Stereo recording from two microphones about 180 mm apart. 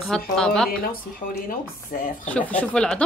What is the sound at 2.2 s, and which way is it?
Speech, 10° left (ahead or behind).